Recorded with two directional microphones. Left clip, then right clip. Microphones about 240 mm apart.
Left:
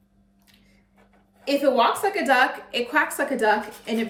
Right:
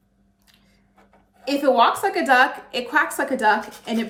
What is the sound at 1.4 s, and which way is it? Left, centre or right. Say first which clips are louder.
A woman's voice: right 2 dB; centre.